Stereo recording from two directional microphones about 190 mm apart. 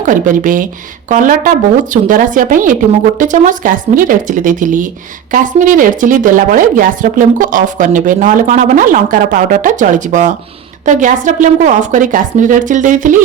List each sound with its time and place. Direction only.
0.0 s speech: 45° right (ahead or behind)